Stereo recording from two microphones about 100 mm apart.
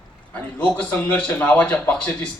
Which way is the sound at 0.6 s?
15° left (ahead or behind).